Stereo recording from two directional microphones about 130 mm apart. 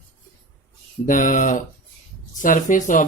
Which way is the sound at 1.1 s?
90° left.